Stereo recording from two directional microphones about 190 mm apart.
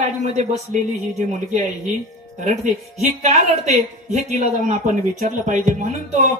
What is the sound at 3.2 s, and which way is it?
A woman's voice, 35° right (ahead or behind).